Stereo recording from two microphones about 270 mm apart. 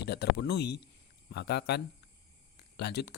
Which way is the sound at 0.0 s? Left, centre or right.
Left.